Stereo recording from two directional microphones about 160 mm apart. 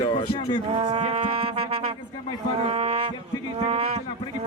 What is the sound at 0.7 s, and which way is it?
Music, 35° right (ahead or behind).